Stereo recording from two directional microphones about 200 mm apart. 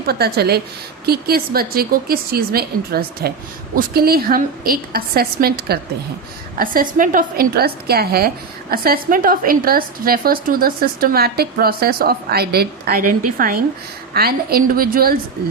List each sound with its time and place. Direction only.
0.0 s a woman's voice: 50° right (ahead or behind)